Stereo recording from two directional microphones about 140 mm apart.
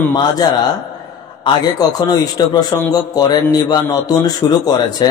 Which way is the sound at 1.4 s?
30° left (ahead or behind).